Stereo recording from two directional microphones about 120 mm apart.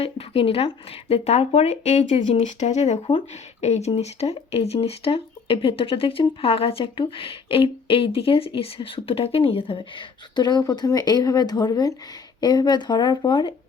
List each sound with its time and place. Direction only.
0.0 s speech: 50° left (ahead or behind); by 3.0 s 70° left (ahead or behind)
3.1 s speech: 60° left (ahead or behind); by 13.5 s 40° left (ahead or behind)